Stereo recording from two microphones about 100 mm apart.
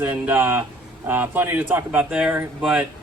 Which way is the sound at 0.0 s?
20° right (ahead or behind).